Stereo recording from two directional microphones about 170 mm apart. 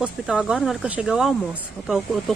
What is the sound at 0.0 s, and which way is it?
Speech, centre (ahead or behind).